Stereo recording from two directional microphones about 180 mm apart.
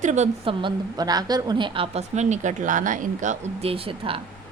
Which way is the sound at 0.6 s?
20° right (ahead or behind).